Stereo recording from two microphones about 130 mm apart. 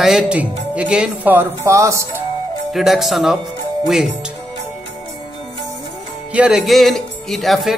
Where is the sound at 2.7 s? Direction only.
Centre (ahead or behind).